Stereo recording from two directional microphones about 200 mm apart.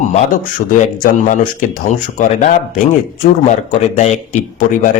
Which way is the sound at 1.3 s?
40° left (ahead or behind).